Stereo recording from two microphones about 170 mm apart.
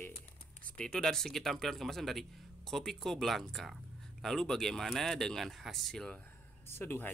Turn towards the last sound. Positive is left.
turn(degrees=15)  # may be behind; listen again after turning